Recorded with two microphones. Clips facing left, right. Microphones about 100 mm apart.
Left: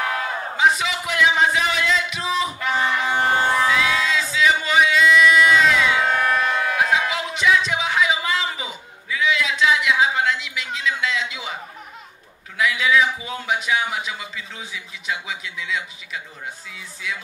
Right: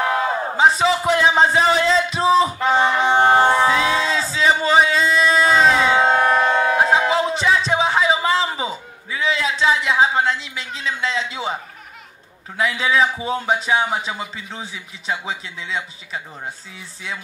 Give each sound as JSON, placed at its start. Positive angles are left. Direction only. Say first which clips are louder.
{"t": 0.0, "sound": "crowd", "louder": "right 5 dB", "side_deg": -30}
{"t": 12.5, "sound": "a man's voice", "louder": "right 1 dB", "side_deg": -35}